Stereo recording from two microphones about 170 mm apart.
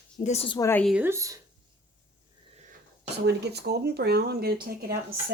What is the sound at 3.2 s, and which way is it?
Speech, 75° right (ahead or behind).